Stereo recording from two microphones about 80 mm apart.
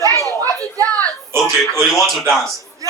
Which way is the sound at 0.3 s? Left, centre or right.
Right.